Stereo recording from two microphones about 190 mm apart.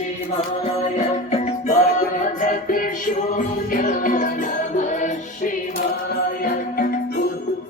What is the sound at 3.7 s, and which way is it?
Music, 45° left (ahead or behind).